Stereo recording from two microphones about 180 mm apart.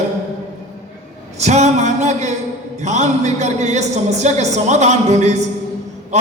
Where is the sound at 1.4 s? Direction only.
40° right (ahead or behind).